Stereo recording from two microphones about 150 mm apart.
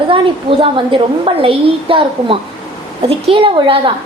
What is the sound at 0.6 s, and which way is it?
A woman's voice, 35° right (ahead or behind).